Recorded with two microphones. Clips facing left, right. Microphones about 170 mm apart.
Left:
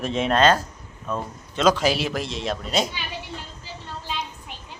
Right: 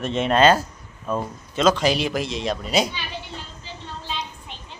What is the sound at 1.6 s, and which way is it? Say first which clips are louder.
Speech: right 1 dB; 10° left (ahead or behind).